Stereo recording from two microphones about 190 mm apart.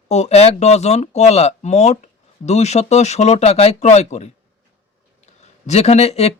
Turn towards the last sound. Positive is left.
turn(degrees=35)  # may be behind; listen again after turning